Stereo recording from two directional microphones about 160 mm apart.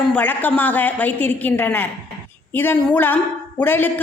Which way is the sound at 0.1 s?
10° left (ahead or behind).